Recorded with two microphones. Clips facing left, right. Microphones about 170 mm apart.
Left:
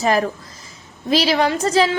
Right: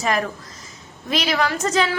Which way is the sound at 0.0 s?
30° left (ahead or behind).